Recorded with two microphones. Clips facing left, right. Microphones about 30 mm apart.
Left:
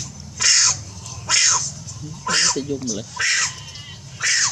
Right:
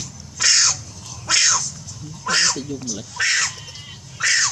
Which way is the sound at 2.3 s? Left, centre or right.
Centre.